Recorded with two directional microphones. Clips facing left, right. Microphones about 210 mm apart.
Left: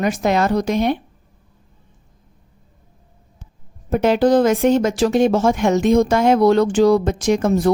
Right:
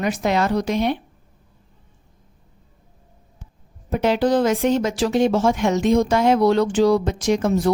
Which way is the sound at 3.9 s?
50° left (ahead or behind).